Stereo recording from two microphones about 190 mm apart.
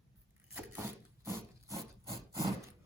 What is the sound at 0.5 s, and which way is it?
Wood, 10° right (ahead or behind).